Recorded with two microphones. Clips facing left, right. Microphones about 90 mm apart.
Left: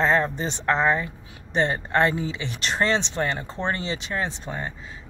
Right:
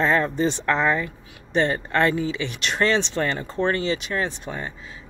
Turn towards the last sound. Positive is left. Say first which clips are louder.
# right 1 dB
turn(degrees=30)  # may be behind; listen again after turning